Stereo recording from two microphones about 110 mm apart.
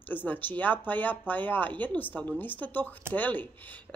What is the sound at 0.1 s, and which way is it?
Speech, 15° left (ahead or behind).